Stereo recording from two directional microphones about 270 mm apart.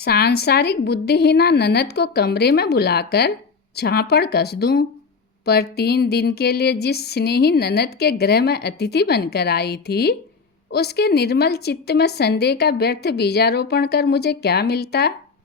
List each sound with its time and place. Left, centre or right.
0.0 s a woman's voice: left